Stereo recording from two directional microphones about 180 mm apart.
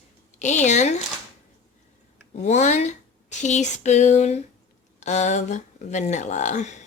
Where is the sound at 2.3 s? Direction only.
40° left (ahead or behind).